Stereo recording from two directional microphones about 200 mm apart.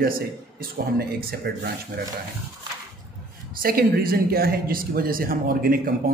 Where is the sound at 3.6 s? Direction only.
50° right (ahead or behind).